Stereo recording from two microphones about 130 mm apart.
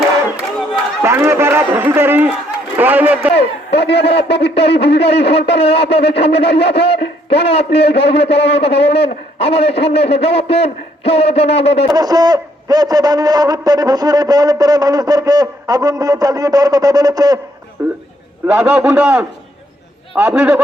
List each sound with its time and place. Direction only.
1.0 s run: 20° right (ahead or behind)
2.7 s a man's voice: 15° right (ahead or behind)
3.8 s a man's voice: 50° left (ahead or behind)
11.9 s a man's voice: 30° right (ahead or behind); by 20.6 s 10° right (ahead or behind)